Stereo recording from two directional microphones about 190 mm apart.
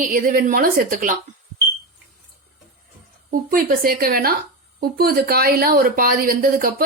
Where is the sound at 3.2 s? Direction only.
50° right (ahead or behind).